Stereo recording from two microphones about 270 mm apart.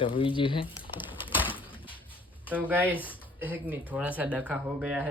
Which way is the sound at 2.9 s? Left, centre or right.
Centre.